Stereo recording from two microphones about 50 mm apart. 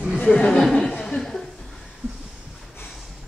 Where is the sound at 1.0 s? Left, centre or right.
Centre.